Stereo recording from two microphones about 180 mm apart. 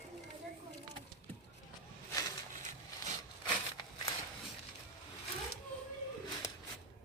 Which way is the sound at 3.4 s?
25° left (ahead or behind).